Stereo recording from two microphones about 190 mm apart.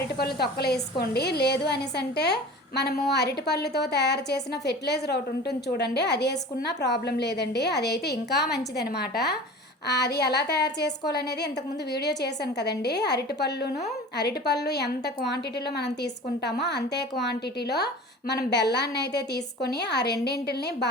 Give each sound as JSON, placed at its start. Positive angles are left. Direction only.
{"t": 0.2, "sound": "a woman's voice", "side_deg": 55}
{"t": 16.4, "sound": "a woman's voice", "side_deg": 65}